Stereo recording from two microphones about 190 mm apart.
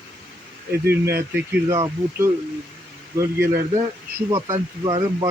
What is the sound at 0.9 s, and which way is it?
Speech, 55° right (ahead or behind).